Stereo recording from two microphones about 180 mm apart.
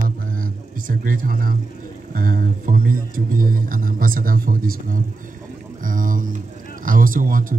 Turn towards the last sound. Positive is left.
turn(degrees=-50)  # may be behind; listen again after turning